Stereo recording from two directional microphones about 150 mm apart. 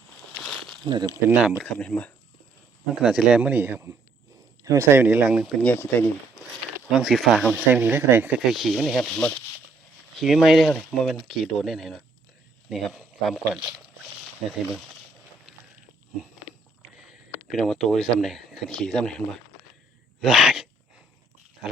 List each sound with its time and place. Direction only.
0.9 s speech: 30° right (ahead or behind)
1.3 s speech: 10° right (ahead or behind)
1.6 s speech: 10° left (ahead or behind)
2.9 s speech: 5° right (ahead or behind)
5.5 s speech: 10° left (ahead or behind)
6.9 s speech: centre (ahead or behind)
7.5 s speech: 10° right (ahead or behind)
8.5 s speech: centre (ahead or behind)
17.1 s speech: centre (ahead or behind)
20.2 s speech: 5° right (ahead or behind)